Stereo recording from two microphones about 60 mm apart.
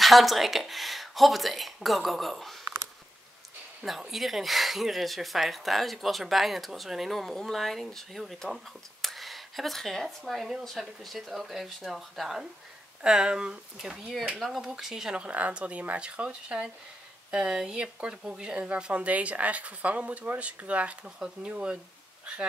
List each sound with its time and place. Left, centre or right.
0.0 s speech: centre
4.1 s speech: centre
15.2 s speech: right